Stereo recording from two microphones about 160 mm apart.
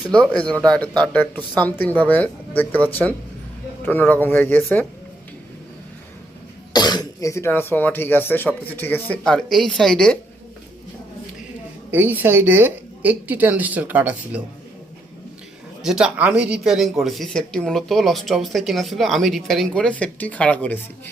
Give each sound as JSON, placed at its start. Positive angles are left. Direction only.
{"t": 0.0, "sound": "speech", "side_deg": 5}
{"t": 6.7, "sound": "speech", "side_deg": 25}
{"t": 11.9, "sound": "a woman's voice", "side_deg": -10}
{"t": 15.8, "sound": "speech", "side_deg": -5}